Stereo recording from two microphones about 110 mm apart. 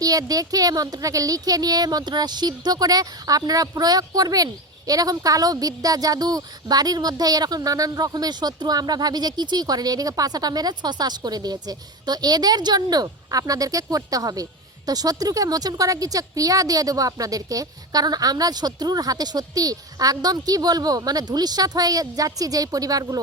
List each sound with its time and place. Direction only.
0.0 s speech: 35° right (ahead or behind)